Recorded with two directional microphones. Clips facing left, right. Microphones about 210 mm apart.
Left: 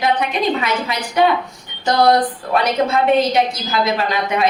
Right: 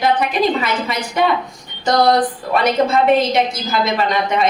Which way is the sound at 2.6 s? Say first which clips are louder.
Right 3 dB; centre (ahead or behind).